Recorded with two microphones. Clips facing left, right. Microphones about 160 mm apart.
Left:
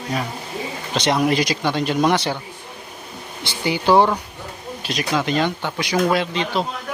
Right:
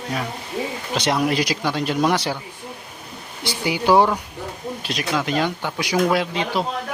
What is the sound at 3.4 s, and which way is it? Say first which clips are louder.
Speech: even; 10° right (ahead or behind).